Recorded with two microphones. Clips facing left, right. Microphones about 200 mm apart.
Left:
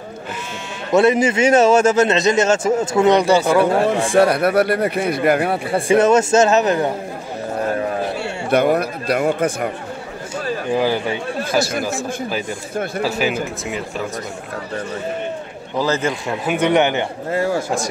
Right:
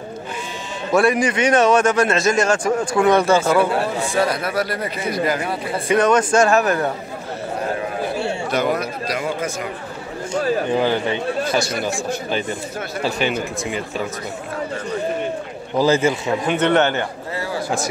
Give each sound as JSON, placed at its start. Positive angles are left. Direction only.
{"t": 0.9, "sound": "a man's voice", "side_deg": 25}
{"t": 3.7, "sound": "a man's voice", "side_deg": 45}
{"t": 4.2, "sound": "speech", "side_deg": 60}
{"t": 5.8, "sound": "a man's voice", "side_deg": 25}
{"t": 8.7, "sound": "speech", "side_deg": 60}
{"t": 10.8, "sound": "speech", "side_deg": 10}
{"t": 15.8, "sound": "a man's voice", "side_deg": -10}
{"t": 16.4, "sound": "speech", "side_deg": 10}
{"t": 17.3, "sound": "a man's voice", "side_deg": 50}